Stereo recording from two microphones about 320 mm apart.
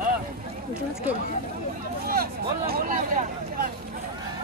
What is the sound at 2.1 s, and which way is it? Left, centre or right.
Vehicle, right.